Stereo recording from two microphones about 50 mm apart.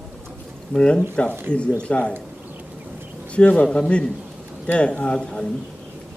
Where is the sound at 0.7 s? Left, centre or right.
Centre.